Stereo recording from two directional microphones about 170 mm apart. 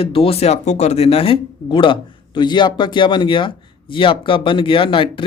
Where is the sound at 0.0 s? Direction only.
35° left (ahead or behind).